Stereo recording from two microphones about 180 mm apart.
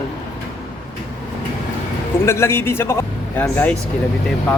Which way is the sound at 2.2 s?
15° left (ahead or behind).